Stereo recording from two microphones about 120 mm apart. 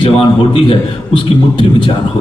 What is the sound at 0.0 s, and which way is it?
A man's voice, 50° left (ahead or behind).